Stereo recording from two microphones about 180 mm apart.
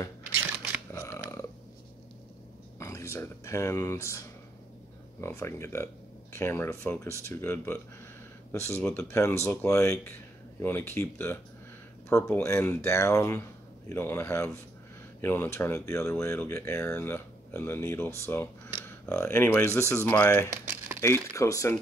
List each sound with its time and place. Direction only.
0.9 s a sound: 15° left (ahead or behind)
2.8 s speech: 15° left (ahead or behind)
5.2 s speech: 15° left (ahead or behind)